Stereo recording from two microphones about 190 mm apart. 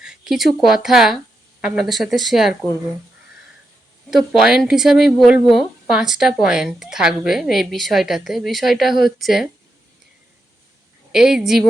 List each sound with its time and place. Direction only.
0.0 s a woman's voice: 5° right (ahead or behind)
4.1 s a woman's voice: centre (ahead or behind)
11.1 s a woman's voice: 5° right (ahead or behind)